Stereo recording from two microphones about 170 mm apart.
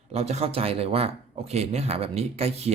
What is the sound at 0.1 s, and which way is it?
Speech, 40° right (ahead or behind).